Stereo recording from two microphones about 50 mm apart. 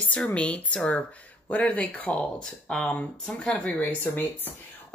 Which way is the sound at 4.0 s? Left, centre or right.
Left.